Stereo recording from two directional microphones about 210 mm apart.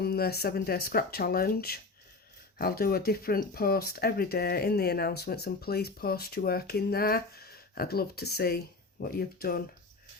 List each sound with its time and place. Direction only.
0.0 s speech: 50° left (ahead or behind)